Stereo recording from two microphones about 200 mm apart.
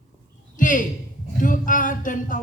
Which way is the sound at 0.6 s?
40° left (ahead or behind).